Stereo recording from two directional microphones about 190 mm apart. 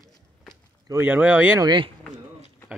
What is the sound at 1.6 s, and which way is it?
Speech, 25° right (ahead or behind).